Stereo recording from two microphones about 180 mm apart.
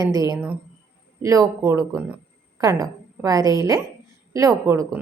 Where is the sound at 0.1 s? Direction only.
20° right (ahead or behind).